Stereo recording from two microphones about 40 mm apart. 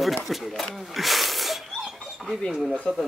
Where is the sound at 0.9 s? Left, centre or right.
Centre.